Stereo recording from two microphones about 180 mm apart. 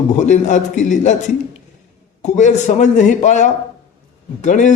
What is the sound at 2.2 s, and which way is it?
A man's voice, 40° left (ahead or behind).